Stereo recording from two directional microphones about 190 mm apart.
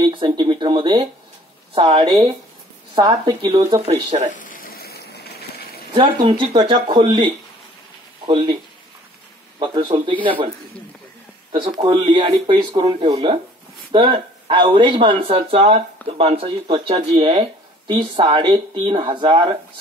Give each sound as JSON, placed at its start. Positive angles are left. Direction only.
{"t": 0.0, "sound": "speech", "side_deg": -25}
{"t": 3.8, "sound": "speech", "side_deg": -35}
{"t": 4.4, "sound": "sizzle", "side_deg": 45}
{"t": 5.9, "sound": "speech", "side_deg": -25}
{"t": 9.6, "sound": "speech", "side_deg": -25}
{"t": 11.7, "sound": "speech", "side_deg": -25}